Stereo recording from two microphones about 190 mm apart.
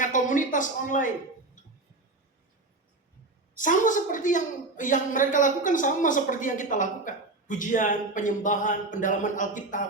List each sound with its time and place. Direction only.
0.0 s a man's voice: 40° left (ahead or behind)
3.6 s a woman's voice: 45° left (ahead or behind)